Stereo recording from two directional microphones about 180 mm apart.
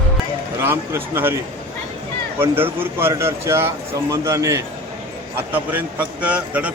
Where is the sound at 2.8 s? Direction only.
15° right (ahead or behind).